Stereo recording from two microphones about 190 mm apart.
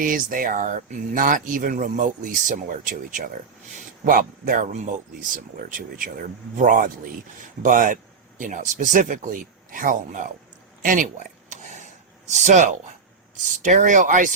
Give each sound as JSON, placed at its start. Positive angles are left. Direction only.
{"t": 0.0, "sound": "speech", "side_deg": -45}
{"t": 10.8, "sound": "a sound", "side_deg": -45}
{"t": 12.3, "sound": "speech", "side_deg": -40}